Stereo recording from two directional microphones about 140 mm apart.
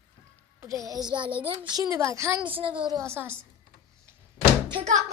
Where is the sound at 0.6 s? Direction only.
25° right (ahead or behind).